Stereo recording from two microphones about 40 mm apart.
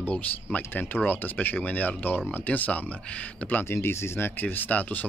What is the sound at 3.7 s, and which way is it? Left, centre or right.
Speech, left.